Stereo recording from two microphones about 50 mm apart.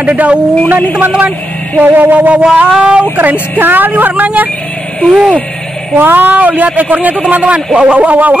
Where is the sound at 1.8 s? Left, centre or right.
Right.